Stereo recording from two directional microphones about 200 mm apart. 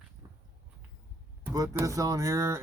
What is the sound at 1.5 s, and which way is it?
Speech, 15° right (ahead or behind).